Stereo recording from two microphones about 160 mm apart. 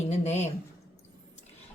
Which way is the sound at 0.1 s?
45° left (ahead or behind).